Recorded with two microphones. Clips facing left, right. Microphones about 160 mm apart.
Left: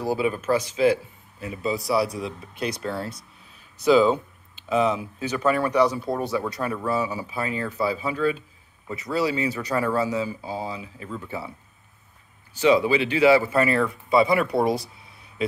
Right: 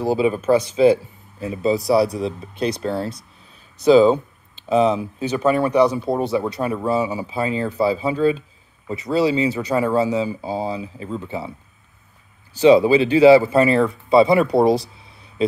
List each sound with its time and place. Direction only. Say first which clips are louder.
0.0 s speech: right 6 dB; 25° right (ahead or behind)
12.5 s speech: right 7 dB; 30° right (ahead or behind)